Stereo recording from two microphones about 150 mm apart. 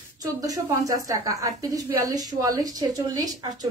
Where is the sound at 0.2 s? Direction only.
25° right (ahead or behind).